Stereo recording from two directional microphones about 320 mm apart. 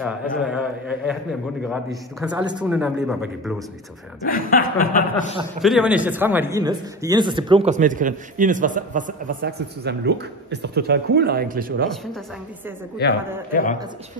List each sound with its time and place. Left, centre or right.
0.0 s a man's voice: centre
4.3 s chuckle: left
5.6 s a man's voice: centre; by 11.7 s right
13.0 s a man's voice: left